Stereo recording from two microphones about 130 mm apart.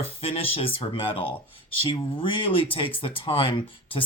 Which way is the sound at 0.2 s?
50° left (ahead or behind).